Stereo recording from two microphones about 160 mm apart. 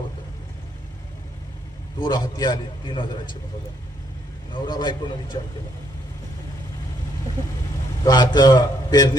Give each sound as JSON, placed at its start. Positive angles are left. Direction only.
{"t": 2.0, "sound": "a man's voice", "side_deg": 25}
{"t": 4.5, "sound": "a man's voice", "side_deg": 30}
{"t": 8.0, "sound": "a man's voice", "side_deg": 25}